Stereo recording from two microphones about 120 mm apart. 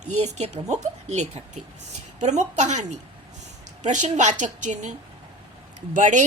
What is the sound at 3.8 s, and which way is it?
A woman's voice, 90° right.